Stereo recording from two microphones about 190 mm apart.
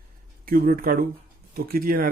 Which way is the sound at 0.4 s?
50° right (ahead or behind).